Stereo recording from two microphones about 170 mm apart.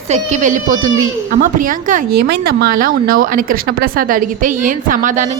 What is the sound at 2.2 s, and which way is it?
A woman's voice, 65° right (ahead or behind).